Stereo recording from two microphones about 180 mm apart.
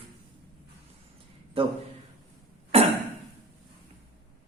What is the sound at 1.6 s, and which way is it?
Speech, 30° right (ahead or behind).